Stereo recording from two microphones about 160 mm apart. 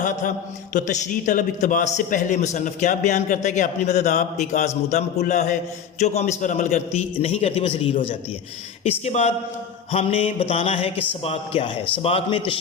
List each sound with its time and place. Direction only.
0.0 s a man's voice: 50° left (ahead or behind); by 12.5 s 35° left (ahead or behind)